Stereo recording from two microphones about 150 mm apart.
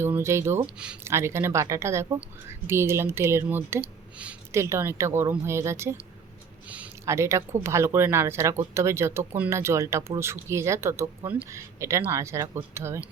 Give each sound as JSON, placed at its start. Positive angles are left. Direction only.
{"t": 0.0, "sound": "speech", "side_deg": -15}